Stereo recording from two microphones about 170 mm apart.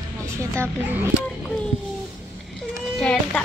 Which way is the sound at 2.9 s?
5° left (ahead or behind).